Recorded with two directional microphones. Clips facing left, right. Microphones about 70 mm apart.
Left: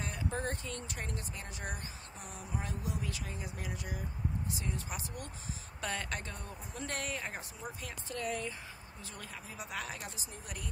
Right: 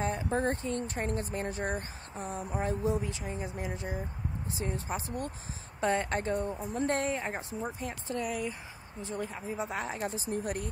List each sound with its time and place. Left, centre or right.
0.0 s speech: right
8.3 s speech: centre
9.0 s speech: right
10.3 s speech: right